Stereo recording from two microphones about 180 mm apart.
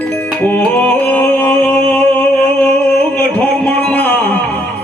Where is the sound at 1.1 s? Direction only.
10° left (ahead or behind).